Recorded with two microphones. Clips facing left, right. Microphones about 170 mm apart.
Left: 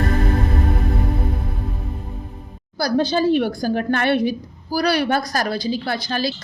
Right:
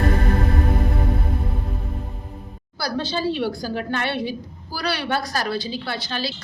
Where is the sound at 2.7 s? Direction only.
40° left (ahead or behind).